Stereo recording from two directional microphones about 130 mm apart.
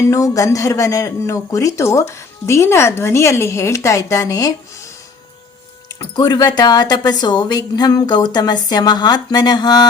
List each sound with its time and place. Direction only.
0.0 s speech: 25° left (ahead or behind)
5.9 s speech: 30° left (ahead or behind)